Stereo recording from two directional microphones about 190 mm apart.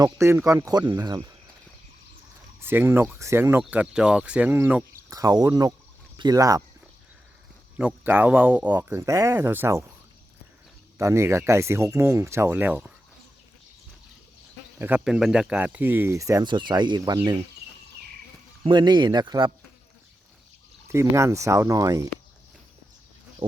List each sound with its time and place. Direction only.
0.0 s speech: 15° right (ahead or behind)
2.6 s speech: 10° right (ahead or behind)
7.8 s speech: 10° right (ahead or behind)
10.9 s speech: 15° right (ahead or behind)
14.8 s speech: 10° right (ahead or behind)
18.6 s speech: 25° right (ahead or behind)
20.8 s speech: 15° right (ahead or behind)
23.4 s speech: 25° right (ahead or behind)